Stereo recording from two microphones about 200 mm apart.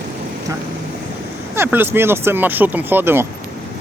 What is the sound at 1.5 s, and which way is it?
Speech, 10° right (ahead or behind).